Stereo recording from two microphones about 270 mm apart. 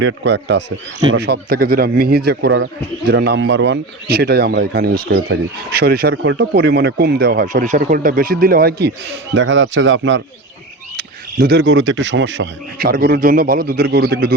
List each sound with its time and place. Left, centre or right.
0.0 s speech: right